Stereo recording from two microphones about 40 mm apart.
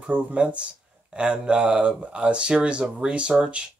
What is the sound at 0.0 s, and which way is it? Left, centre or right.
Speech, right.